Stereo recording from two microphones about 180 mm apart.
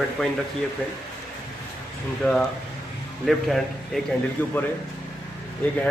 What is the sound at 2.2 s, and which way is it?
A man's voice, 5° left (ahead or behind).